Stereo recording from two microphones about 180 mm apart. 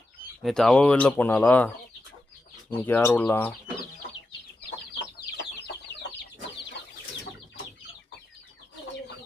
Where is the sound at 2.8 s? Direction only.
10° left (ahead or behind).